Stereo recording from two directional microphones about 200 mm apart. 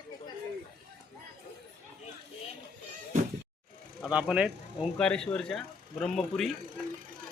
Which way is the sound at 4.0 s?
5° right (ahead or behind).